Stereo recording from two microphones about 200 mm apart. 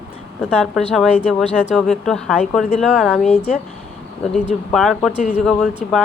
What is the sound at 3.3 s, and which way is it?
Speech, 30° left (ahead or behind).